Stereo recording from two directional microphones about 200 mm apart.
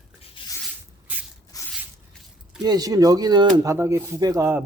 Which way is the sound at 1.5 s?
15° left (ahead or behind).